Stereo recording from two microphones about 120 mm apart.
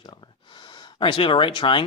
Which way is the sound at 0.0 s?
40° left (ahead or behind).